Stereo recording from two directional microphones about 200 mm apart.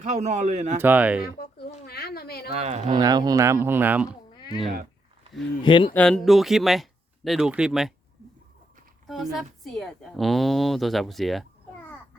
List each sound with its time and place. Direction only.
0.0 s a man's voice: 35° right (ahead or behind)
0.8 s speech: 10° right (ahead or behind)
1.9 s a sound: 50° left (ahead or behind)
2.5 s a man's voice: 30° right (ahead or behind)
2.9 s speech: 20° right (ahead or behind)
5.6 s speech: 25° left (ahead or behind)
5.9 s speech: 5° left (ahead or behind)
9.0 s a woman's voice: centre (ahead or behind)